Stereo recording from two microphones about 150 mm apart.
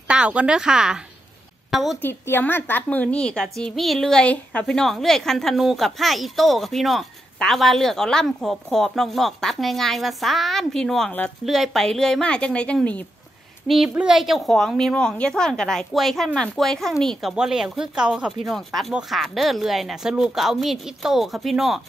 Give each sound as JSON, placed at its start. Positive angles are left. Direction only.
{"t": 0.1, "sound": "a woman's voice", "side_deg": -10}
{"t": 2.0, "sound": "a woman's voice", "side_deg": 15}
{"t": 13.7, "sound": "a woman's voice", "side_deg": -5}